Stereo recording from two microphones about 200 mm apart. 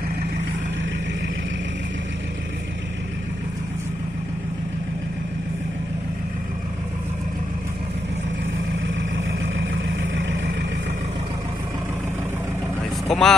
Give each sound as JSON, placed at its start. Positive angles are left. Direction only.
{"t": 9.6, "sound": "vehicle", "side_deg": -70}
{"t": 13.1, "sound": "vehicle", "side_deg": 0}